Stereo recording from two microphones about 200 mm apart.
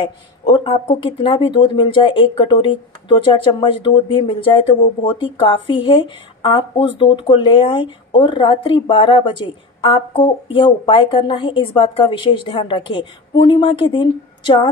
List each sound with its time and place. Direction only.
0.0 s speech: 25° left (ahead or behind)